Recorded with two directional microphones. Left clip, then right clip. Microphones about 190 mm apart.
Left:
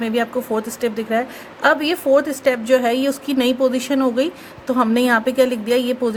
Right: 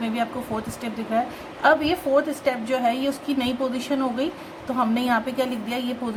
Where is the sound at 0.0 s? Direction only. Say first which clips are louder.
Left 6 dB; 45° left (ahead or behind).